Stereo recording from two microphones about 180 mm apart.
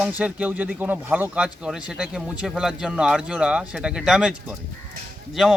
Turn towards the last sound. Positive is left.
turn(degrees=0)  # may be behind; listen again after turning